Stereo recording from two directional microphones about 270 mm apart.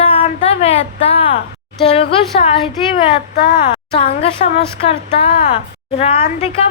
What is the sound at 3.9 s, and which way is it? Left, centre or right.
A woman's voice, left.